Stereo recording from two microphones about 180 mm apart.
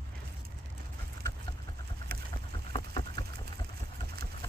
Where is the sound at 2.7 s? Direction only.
25° left (ahead or behind).